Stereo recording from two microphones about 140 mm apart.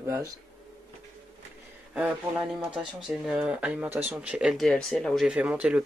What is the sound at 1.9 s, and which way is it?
Speech, 10° right (ahead or behind).